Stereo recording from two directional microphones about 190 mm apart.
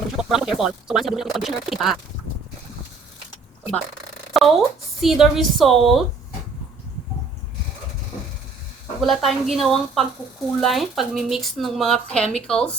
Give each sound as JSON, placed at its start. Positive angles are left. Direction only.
{"t": 0.2, "sound": "speech", "side_deg": 0}
{"t": 4.4, "sound": "a sound", "side_deg": 0}
{"t": 4.9, "sound": "speech", "side_deg": 0}
{"t": 9.0, "sound": "speech", "side_deg": 0}